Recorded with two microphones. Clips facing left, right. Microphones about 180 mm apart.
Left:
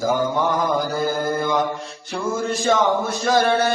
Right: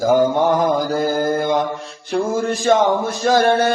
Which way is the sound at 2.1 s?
55° right (ahead or behind).